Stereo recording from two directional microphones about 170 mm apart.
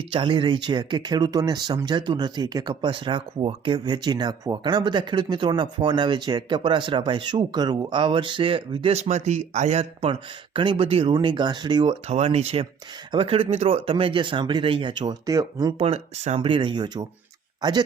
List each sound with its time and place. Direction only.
0.1 s speech: 30° right (ahead or behind)
12.1 s speech: 40° right (ahead or behind); by 15.7 s 20° right (ahead or behind)
15.8 s speech: 40° right (ahead or behind)